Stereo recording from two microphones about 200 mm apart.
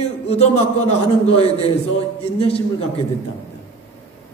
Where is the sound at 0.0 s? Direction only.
35° left (ahead or behind).